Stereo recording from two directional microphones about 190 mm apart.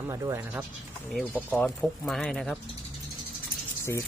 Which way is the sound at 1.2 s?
5° left (ahead or behind).